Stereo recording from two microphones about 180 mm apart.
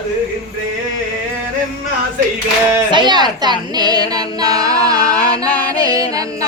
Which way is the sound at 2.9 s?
25° right (ahead or behind).